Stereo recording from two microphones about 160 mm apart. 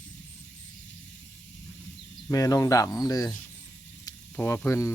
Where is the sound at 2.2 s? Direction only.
20° left (ahead or behind).